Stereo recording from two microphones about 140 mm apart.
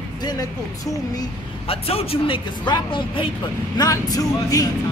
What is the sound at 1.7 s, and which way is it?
Speech, 45° left (ahead or behind).